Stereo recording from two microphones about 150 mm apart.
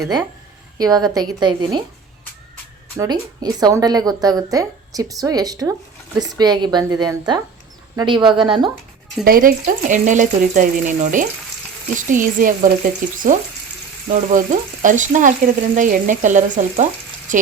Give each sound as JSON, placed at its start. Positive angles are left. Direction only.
{"t": 0.8, "sound": "a woman's voice", "side_deg": -25}
{"t": 3.0, "sound": "a woman's voice", "side_deg": -25}
{"t": 9.2, "sound": "speech", "side_deg": -75}